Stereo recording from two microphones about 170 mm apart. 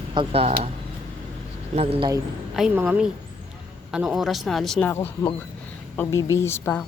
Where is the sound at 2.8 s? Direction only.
5° right (ahead or behind).